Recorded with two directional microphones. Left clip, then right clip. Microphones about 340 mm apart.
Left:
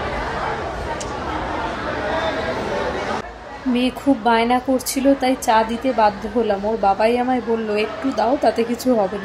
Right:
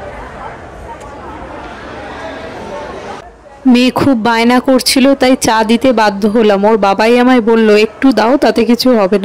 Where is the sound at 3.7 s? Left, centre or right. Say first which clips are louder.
Right 8 dB; right.